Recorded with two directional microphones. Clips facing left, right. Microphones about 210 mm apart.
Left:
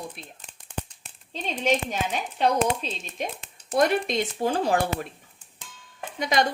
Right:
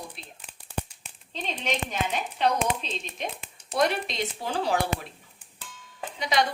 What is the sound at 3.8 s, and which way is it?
A woman's voice, 50° left (ahead or behind).